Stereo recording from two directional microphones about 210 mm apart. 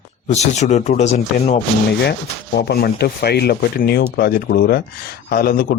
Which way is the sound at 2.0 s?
50° left (ahead or behind).